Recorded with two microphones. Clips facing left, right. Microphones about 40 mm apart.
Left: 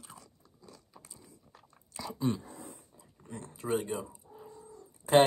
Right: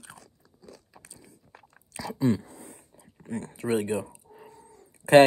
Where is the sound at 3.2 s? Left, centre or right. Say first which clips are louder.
Right 9 dB; right.